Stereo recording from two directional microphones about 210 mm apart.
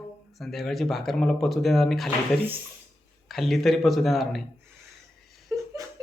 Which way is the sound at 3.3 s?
Centre (ahead or behind).